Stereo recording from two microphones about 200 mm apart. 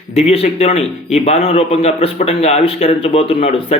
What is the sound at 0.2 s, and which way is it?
A man's voice, 30° left (ahead or behind).